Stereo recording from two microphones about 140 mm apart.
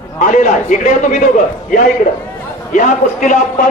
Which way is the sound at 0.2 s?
65° left (ahead or behind).